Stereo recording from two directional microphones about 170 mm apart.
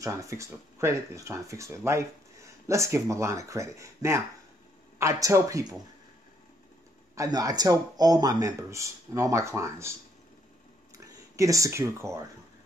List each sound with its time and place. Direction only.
0.0 s speech: 20° right (ahead or behind)
7.2 s speech: 20° right (ahead or behind)
10.9 s a sound: 20° right (ahead or behind)